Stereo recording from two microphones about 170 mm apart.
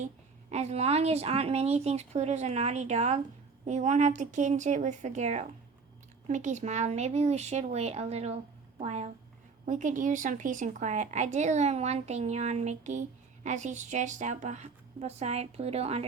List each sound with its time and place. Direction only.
0.5 s a woman's voice: 40° right (ahead or behind)